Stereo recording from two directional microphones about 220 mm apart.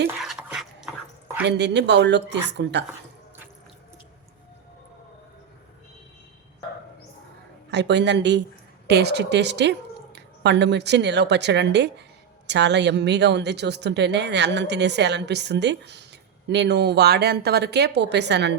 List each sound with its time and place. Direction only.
0.2 s dog: centre (ahead or behind)
1.5 s a woman's voice: 50° right (ahead or behind)
7.7 s a woman's voice: 50° right (ahead or behind)